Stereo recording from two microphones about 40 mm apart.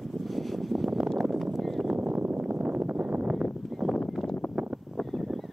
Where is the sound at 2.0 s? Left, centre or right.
Right.